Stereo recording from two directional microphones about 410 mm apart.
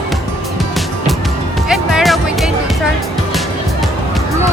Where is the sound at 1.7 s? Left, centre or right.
Centre.